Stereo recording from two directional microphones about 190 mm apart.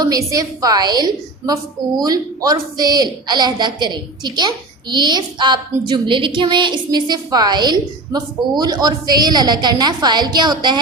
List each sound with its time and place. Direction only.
0.0 s speech: 20° right (ahead or behind)